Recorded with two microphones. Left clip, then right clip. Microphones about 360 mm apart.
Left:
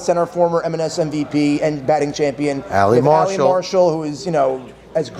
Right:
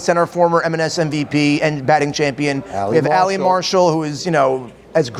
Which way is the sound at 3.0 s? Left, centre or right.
Right.